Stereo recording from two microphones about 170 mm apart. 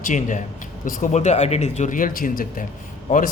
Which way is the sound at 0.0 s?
50° left (ahead or behind).